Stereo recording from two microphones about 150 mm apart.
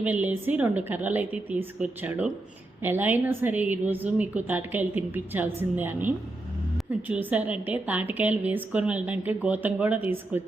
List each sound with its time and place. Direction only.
0.0 s a woman's voice: 10° right (ahead or behind)